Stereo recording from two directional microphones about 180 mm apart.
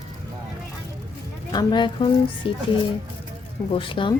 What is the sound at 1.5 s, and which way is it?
Speech, 25° left (ahead or behind).